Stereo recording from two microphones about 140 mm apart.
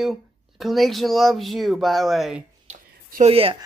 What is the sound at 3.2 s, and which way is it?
Speech, 45° right (ahead or behind).